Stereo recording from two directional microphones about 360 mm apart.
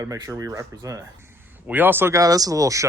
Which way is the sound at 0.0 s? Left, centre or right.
Centre.